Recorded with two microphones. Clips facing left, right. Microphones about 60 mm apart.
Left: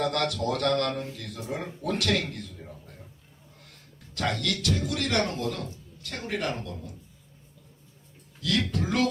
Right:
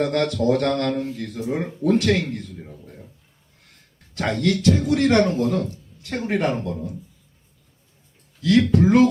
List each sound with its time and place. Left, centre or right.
0.0 s a man's voice: right
4.4 s a man's voice: right
8.4 s a man's voice: right